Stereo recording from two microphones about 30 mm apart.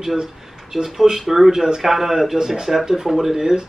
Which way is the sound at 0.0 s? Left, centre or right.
Centre.